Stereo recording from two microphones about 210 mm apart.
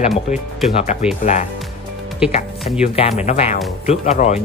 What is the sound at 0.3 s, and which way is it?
Speech, 35° left (ahead or behind).